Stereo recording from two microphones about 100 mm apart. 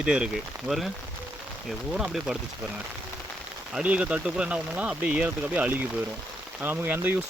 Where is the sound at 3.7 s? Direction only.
10° right (ahead or behind).